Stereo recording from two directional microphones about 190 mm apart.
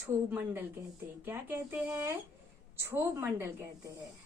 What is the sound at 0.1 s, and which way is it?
A woman's voice, 10° right (ahead or behind).